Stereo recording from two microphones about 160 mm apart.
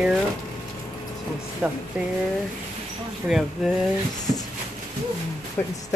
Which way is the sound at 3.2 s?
Centre (ahead or behind).